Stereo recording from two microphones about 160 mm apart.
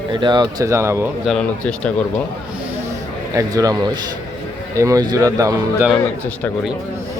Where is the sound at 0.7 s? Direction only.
15° right (ahead or behind).